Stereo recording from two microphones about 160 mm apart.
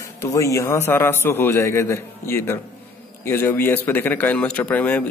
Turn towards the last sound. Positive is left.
turn(degrees=10)  # may be behind; listen again after turning